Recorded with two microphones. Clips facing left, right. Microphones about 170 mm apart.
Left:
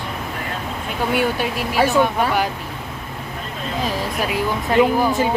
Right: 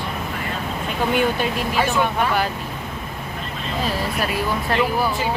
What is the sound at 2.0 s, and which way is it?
Speech, 15° left (ahead or behind).